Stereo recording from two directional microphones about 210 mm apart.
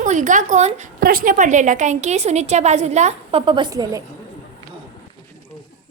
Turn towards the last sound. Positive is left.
turn(degrees=-15)  # may be behind; listen again after turning